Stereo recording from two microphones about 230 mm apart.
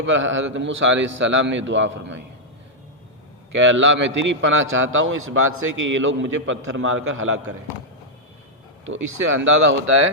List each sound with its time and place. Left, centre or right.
0.0 s a man's voice: right
3.5 s a man's voice: right
8.8 s a man's voice: right